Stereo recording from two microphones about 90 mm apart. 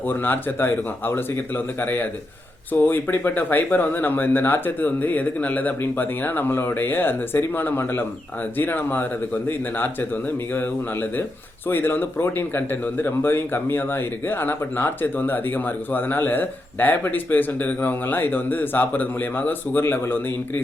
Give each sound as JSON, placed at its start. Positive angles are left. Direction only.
{"t": 0.1, "sound": "speech", "side_deg": 20}
{"t": 11.7, "sound": "speech", "side_deg": 25}